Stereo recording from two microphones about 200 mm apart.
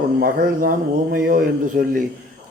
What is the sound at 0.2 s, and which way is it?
Speech, 45° right (ahead or behind).